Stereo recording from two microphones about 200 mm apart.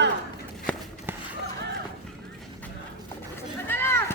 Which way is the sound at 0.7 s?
5° left (ahead or behind).